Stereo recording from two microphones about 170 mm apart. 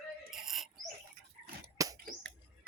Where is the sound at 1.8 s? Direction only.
20° right (ahead or behind).